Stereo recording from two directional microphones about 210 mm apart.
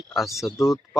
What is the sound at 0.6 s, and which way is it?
Speech, centre (ahead or behind).